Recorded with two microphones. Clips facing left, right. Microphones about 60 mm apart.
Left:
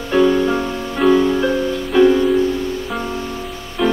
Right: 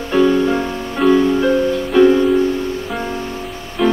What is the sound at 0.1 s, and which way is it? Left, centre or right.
Music, centre.